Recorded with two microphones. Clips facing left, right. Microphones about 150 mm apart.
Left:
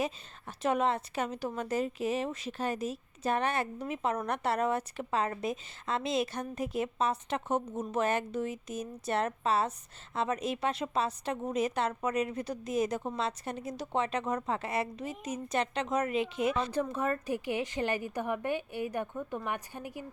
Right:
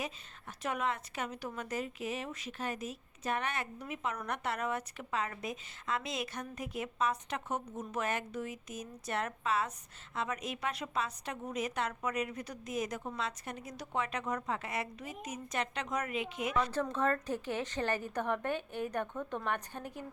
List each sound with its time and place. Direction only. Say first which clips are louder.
0.0 s a woman's voice: left 7 dB; 30° left (ahead or behind)
16.8 s a woman's voice: even; 10° left (ahead or behind)